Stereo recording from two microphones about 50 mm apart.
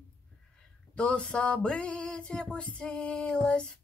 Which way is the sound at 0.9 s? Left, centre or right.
Centre.